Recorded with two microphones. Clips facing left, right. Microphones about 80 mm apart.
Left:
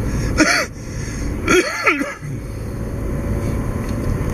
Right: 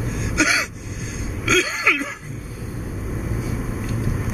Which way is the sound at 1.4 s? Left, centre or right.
Centre.